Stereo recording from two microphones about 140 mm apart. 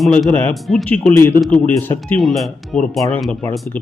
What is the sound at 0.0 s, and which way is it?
Speech, centre (ahead or behind).